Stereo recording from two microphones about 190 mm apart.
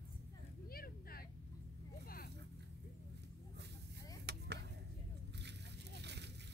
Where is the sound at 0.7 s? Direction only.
50° left (ahead or behind).